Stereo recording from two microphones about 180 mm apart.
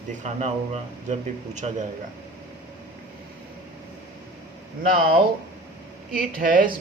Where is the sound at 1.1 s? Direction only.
40° right (ahead or behind).